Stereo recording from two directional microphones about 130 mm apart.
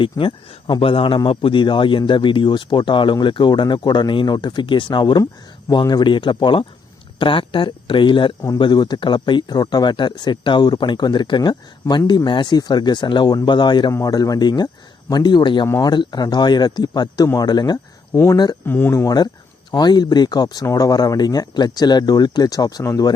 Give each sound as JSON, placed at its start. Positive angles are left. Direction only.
{"t": 0.0, "sound": "speech", "side_deg": 40}
{"t": 18.6, "sound": "speech", "side_deg": 15}